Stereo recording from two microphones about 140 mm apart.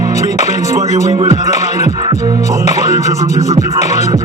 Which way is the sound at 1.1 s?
45° right (ahead or behind).